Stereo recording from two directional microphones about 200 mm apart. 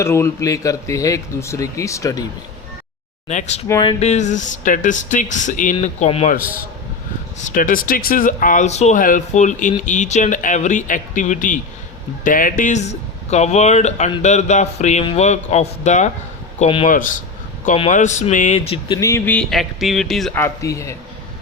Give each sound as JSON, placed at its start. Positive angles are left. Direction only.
{"t": 0.0, "sound": "speech", "side_deg": 15}
{"t": 3.2, "sound": "speech", "side_deg": 35}
{"t": 3.7, "sound": "a sound", "side_deg": 20}
{"t": 4.0, "sound": "speech", "side_deg": 35}
{"t": 7.5, "sound": "speech", "side_deg": 45}
{"t": 18.9, "sound": "speech", "side_deg": 15}